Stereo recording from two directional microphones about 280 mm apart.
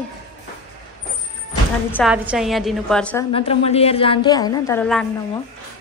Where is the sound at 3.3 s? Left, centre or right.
Centre.